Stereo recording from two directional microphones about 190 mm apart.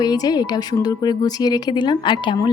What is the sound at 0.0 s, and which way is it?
A woman's voice, 20° left (ahead or behind).